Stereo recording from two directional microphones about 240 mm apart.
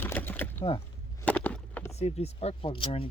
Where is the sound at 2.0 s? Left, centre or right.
Left.